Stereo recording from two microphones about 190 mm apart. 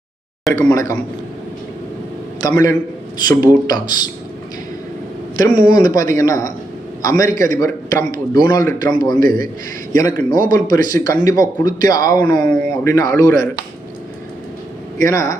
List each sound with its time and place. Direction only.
0.7 s a man's voice: 15° left (ahead or behind)
2.4 s a man's voice: 20° left (ahead or behind)
5.4 s a man's voice: 20° left (ahead or behind)
15.0 s a man's voice: 15° left (ahead or behind)